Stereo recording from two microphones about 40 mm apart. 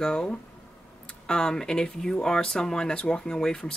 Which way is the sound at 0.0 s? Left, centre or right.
Centre.